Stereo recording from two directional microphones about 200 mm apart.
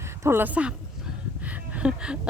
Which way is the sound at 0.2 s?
10° right (ahead or behind).